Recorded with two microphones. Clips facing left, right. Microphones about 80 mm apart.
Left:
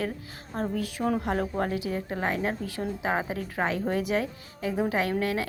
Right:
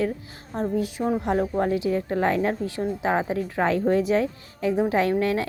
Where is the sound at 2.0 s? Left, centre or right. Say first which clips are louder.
Right 6 dB; right.